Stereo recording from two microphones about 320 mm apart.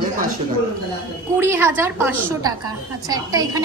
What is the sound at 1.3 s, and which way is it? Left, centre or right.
A woman's voice, centre.